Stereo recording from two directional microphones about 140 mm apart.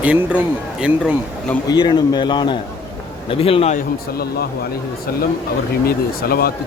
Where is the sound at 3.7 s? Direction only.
90° left.